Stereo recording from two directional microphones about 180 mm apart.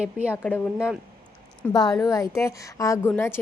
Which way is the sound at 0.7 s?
5° right (ahead or behind).